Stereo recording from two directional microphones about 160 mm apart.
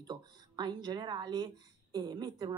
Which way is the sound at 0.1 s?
25° right (ahead or behind).